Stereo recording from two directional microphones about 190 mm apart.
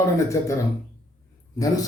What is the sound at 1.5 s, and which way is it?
Speech, 20° left (ahead or behind).